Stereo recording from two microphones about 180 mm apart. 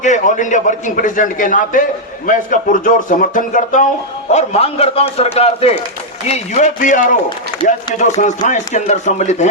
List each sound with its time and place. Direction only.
0.0 s a man's voice: 45° left (ahead or behind)